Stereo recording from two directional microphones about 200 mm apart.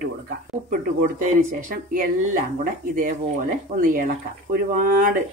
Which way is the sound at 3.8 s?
45° right (ahead or behind).